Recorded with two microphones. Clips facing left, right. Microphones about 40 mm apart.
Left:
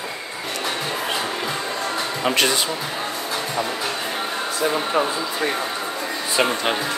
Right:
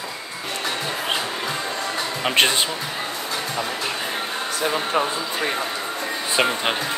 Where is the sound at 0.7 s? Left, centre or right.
Centre.